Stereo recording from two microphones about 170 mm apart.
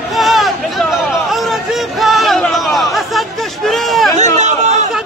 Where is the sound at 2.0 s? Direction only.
Centre (ahead or behind).